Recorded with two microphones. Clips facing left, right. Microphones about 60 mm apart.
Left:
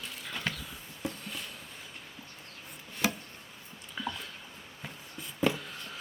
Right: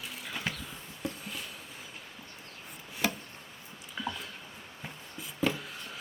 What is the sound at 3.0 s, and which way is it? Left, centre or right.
Chopping, centre.